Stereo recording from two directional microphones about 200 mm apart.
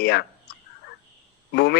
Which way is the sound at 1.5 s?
55° left (ahead or behind).